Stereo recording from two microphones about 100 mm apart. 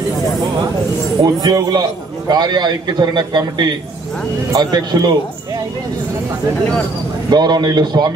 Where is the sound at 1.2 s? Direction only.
40° right (ahead or behind).